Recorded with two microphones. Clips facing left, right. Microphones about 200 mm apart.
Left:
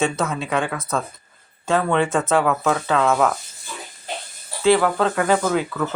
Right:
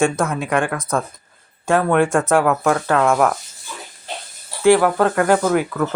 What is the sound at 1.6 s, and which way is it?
Speech, 10° right (ahead or behind).